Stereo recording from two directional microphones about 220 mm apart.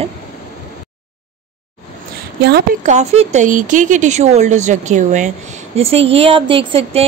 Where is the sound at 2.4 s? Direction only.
50° right (ahead or behind).